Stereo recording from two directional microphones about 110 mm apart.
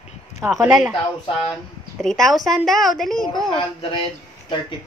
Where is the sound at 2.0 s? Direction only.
5° left (ahead or behind).